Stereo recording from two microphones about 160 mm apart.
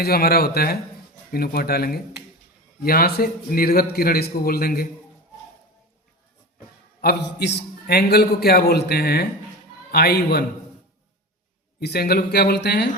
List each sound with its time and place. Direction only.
0.0 s a man's voice: 70° left (ahead or behind)
7.0 s a man's voice: 85° left
11.8 s speech: 85° left